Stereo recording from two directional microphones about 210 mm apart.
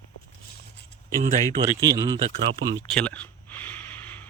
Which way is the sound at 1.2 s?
35° right (ahead or behind).